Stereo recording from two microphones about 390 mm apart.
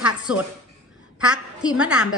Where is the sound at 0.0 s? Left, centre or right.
Centre.